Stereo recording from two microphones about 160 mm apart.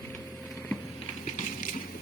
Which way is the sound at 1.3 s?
60° left (ahead or behind).